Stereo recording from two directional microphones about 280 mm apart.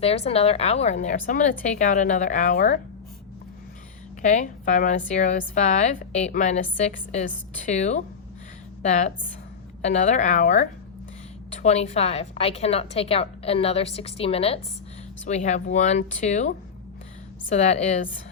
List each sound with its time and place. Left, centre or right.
0.0 s a woman's voice: left
4.2 s a woman's voice: left